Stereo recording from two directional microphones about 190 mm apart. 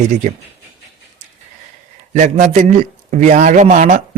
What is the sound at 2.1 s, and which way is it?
A man's voice, 40° right (ahead or behind).